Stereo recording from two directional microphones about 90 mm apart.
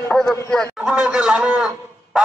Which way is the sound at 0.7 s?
5° right (ahead or behind).